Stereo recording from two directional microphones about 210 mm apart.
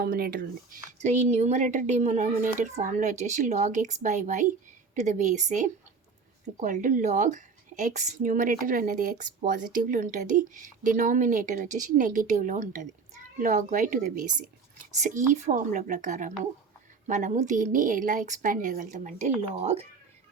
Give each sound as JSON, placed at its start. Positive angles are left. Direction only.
{"t": 0.0, "sound": "speech", "side_deg": -45}